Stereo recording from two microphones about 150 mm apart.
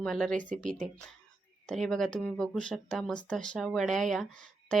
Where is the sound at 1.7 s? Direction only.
5° left (ahead or behind).